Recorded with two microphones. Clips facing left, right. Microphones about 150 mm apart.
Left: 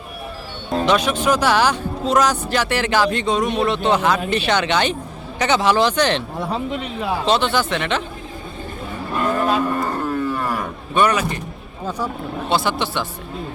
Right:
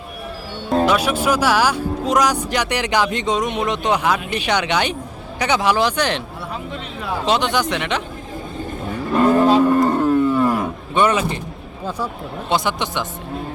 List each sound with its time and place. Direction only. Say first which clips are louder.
0.9 s speech: left 4 dB; 10° right (ahead or behind)
7.3 s speech: right 1 dB; 15° right (ahead or behind)
9.2 s cattle: right 6 dB; 30° right (ahead or behind)
9.8 s wild animals: right 7 dB; 25° right (ahead or behind)
10.5 s a sound: right 2 dB; 25° right (ahead or behind)
12.5 s speech: even; 15° right (ahead or behind)